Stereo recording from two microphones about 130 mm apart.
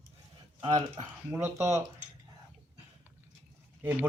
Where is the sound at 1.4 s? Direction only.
20° right (ahead or behind).